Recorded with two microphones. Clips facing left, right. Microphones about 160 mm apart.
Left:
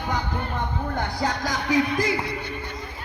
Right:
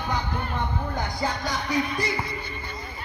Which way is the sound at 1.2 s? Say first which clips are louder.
Left 2 dB; 90° left.